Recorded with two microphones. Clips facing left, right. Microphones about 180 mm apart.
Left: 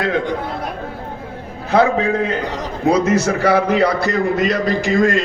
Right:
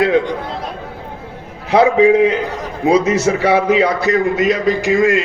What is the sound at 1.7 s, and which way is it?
A man's voice, 15° right (ahead or behind).